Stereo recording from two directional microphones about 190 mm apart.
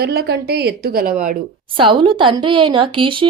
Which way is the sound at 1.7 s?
25° right (ahead or behind).